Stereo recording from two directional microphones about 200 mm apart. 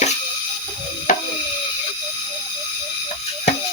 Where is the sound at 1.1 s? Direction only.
35° left (ahead or behind).